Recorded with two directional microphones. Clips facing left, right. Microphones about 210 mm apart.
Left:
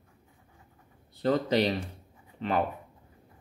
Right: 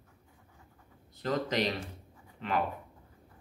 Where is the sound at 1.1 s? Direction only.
30° left (ahead or behind).